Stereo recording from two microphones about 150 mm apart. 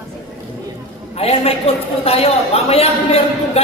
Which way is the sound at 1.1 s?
45° left (ahead or behind).